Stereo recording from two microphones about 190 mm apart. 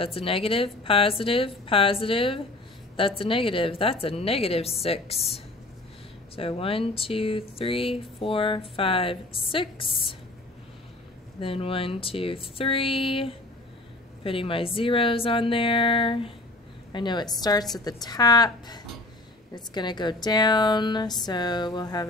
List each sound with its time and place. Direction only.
0.0 s speech: 30° left (ahead or behind)
6.3 s speech: 30° left (ahead or behind)
11.3 s speech: 30° left (ahead or behind)